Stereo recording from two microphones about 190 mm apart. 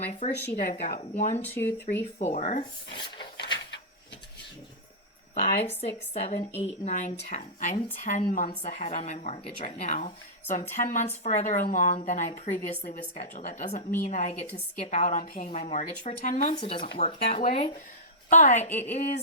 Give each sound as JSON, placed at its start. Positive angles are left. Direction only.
{"t": 0.1, "sound": "a woman's voice", "side_deg": 35}
{"t": 1.4, "sound": "speech", "side_deg": 10}
{"t": 2.1, "sound": "a woman's voice", "side_deg": 35}
{"t": 2.9, "sound": "a sound", "side_deg": 25}
{"t": 3.3, "sound": "a sound", "side_deg": 65}
{"t": 5.3, "sound": "a woman's voice", "side_deg": 35}
{"t": 16.6, "sound": "a woman's voice", "side_deg": 25}